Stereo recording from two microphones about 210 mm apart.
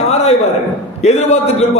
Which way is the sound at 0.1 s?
30° left (ahead or behind).